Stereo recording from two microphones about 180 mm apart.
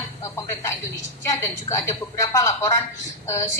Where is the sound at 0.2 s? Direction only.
20° left (ahead or behind).